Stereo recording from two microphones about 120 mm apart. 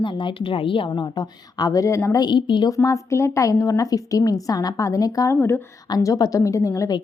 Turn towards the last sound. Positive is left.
turn(degrees=25)  # may be behind; listen again after turning